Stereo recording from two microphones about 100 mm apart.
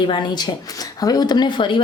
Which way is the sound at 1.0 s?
40° left (ahead or behind).